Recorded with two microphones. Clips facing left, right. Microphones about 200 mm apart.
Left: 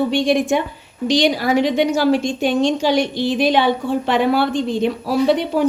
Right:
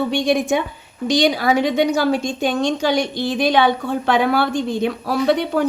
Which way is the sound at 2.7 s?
5° left (ahead or behind).